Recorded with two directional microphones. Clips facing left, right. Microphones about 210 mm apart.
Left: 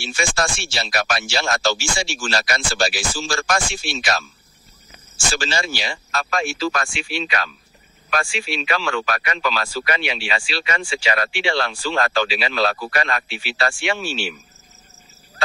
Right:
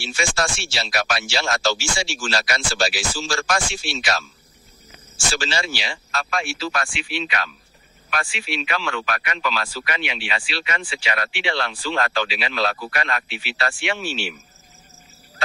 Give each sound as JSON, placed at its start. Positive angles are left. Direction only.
{"t": 0.0, "sound": "speech", "side_deg": 50}
{"t": 5.3, "sound": "speech", "side_deg": 45}